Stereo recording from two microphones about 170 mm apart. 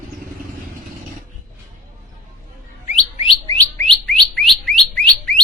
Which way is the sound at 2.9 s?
35° left (ahead or behind).